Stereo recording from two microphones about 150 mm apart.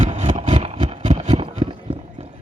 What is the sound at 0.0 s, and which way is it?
Vehicle, 50° right (ahead or behind).